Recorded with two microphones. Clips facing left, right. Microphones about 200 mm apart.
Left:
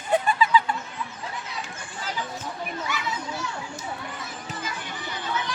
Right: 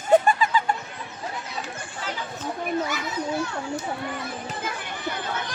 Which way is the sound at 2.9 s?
55° right (ahead or behind).